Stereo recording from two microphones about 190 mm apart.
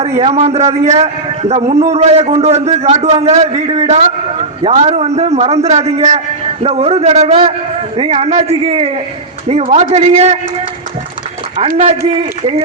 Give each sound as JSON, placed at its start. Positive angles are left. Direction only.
{"t": 0.2, "sound": "a man's voice", "side_deg": -35}
{"t": 11.5, "sound": "a man's voice", "side_deg": -35}